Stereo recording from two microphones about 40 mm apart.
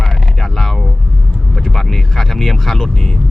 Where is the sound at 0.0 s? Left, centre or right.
Centre.